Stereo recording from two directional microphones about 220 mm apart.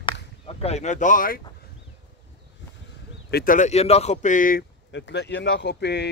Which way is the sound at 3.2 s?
40° left (ahead or behind).